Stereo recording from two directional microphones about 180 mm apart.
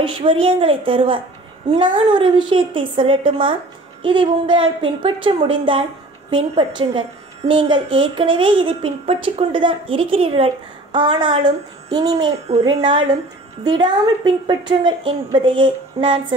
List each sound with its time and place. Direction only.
0.0 s a woman's voice: 30° right (ahead or behind)